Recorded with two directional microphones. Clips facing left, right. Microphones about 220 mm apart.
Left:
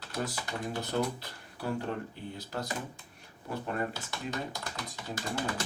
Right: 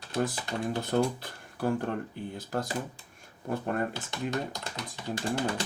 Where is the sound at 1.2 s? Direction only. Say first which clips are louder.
Right 7 dB; 50° right (ahead or behind).